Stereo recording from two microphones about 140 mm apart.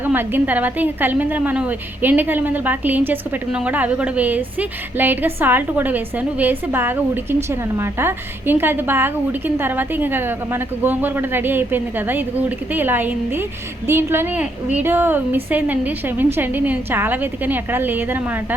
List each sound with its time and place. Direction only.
0.0 s a woman's voice: 15° right (ahead or behind)